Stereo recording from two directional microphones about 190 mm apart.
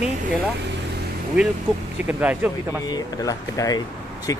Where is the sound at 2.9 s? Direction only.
20° left (ahead or behind).